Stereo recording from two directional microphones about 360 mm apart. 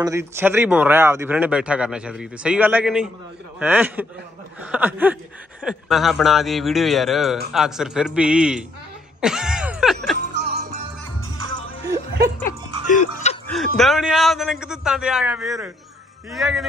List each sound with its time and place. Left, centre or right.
0.0 s speech: centre
10.4 s music: right
12.4 s music: left
13.7 s speech: centre